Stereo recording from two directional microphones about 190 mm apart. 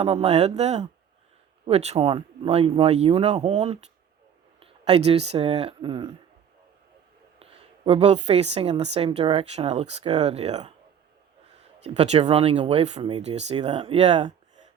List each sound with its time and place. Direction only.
0.0 s a woman's voice: 30° right (ahead or behind)
7.9 s a woman's voice: 30° right (ahead or behind)
11.8 s a woman's voice: 35° right (ahead or behind)